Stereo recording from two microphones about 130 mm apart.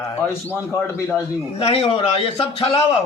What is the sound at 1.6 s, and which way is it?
A man's voice, 45° left (ahead or behind).